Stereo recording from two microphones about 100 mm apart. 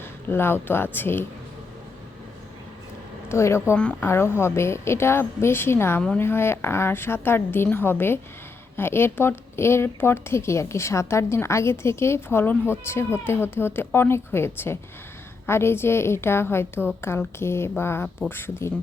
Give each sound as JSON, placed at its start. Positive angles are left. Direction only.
{"t": 0.3, "sound": "speech", "side_deg": 25}
{"t": 3.2, "sound": "speech", "side_deg": 25}